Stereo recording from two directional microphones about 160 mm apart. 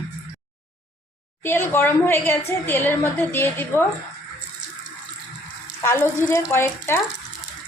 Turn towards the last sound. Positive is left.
turn(degrees=15)  # may be behind; listen again after turning